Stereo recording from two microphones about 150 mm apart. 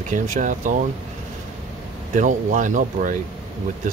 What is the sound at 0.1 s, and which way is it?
Speech, 60° right (ahead or behind).